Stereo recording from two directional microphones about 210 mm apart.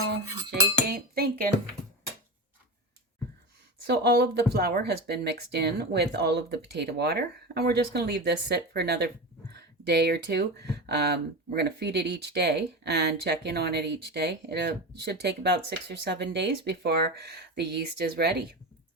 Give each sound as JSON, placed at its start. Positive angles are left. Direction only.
{"t": 0.9, "sound": "cutlery", "side_deg": -45}
{"t": 3.8, "sound": "speech", "side_deg": -50}